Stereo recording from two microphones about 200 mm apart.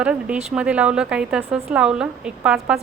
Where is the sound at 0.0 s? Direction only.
5° right (ahead or behind).